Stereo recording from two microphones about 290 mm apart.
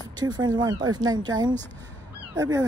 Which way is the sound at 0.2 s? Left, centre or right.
Centre.